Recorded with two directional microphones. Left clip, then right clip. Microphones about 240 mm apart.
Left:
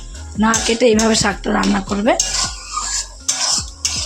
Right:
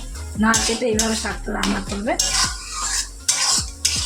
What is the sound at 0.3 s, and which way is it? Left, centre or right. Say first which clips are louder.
Speech: left 3 dB; left.